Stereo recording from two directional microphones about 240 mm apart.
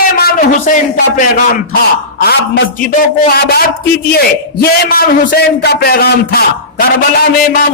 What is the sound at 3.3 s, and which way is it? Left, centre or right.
A man's voice, left.